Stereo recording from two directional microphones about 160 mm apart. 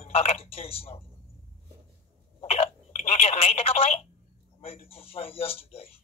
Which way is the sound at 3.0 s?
40° left (ahead or behind).